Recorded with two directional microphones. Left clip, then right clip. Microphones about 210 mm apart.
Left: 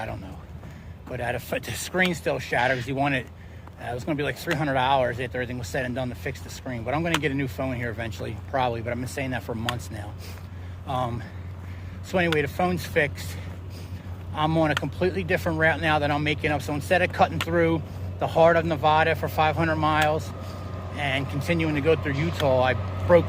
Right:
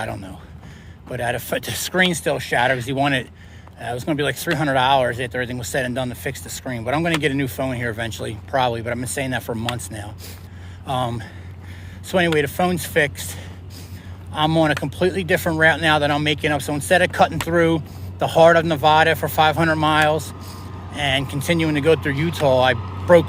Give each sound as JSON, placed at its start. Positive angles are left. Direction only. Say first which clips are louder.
{"t": 1.1, "sound": "speech", "louder": "right 5 dB", "side_deg": -40}
{"t": 22.8, "sound": "vehicle", "louder": "right 1 dB", "side_deg": 20}